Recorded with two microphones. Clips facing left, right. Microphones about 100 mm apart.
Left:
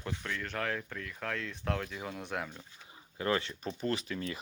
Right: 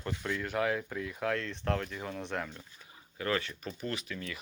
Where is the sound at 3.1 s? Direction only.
25° left (ahead or behind).